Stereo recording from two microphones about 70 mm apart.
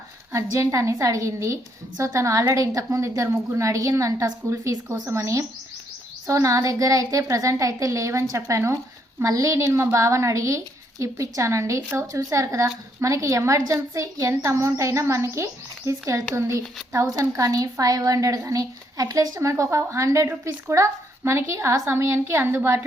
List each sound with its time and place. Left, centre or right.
0.3 s a woman's voice: right